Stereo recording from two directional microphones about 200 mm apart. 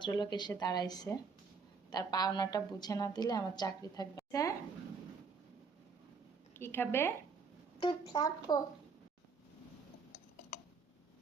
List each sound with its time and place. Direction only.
0.0 s a woman's voice: 20° left (ahead or behind)
6.6 s a woman's voice: 10° left (ahead or behind)
7.8 s a woman's voice: 20° left (ahead or behind)